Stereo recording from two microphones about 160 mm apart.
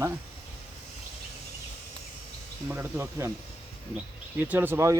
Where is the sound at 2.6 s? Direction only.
15° right (ahead or behind).